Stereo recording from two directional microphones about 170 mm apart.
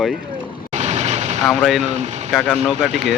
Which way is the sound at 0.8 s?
40° right (ahead or behind).